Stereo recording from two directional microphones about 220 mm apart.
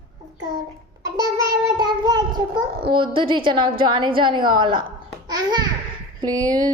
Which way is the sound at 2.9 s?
20° right (ahead or behind).